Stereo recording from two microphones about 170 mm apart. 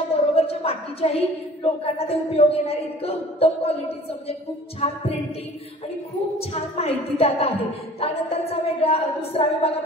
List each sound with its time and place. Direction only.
0.1 s a sound: 35° left (ahead or behind)
1.6 s speech: 35° left (ahead or behind)
6.5 s speech: 35° left (ahead or behind)